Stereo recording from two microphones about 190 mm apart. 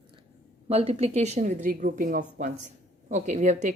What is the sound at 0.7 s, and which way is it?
A woman's voice, 30° right (ahead or behind).